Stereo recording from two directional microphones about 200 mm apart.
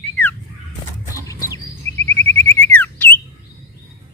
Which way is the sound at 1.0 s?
15° left (ahead or behind).